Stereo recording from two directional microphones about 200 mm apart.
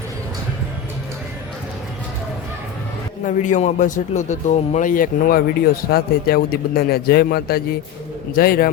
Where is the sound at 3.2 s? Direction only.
35° left (ahead or behind).